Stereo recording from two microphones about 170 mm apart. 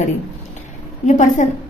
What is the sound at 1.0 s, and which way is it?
Speech, 45° left (ahead or behind).